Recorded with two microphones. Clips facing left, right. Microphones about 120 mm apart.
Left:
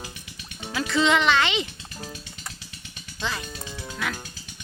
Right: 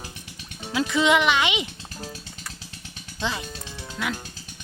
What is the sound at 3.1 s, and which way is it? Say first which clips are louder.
Speech: right 2 dB; 20° right (ahead or behind).